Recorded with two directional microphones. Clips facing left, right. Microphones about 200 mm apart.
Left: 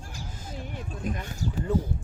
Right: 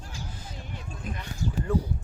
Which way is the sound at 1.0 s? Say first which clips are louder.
Left 5 dB; 45° left (ahead or behind).